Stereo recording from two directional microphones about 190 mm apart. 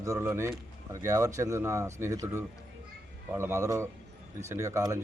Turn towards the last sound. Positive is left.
turn(degrees=-15)  # may be behind; listen again after turning